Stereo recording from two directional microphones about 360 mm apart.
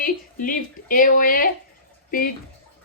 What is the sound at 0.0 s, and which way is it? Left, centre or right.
A woman's voice, left.